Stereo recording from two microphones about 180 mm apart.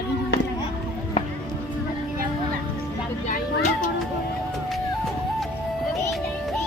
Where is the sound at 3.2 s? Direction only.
40° left (ahead or behind).